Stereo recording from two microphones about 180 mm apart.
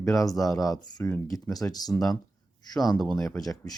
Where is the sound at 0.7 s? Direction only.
15° left (ahead or behind).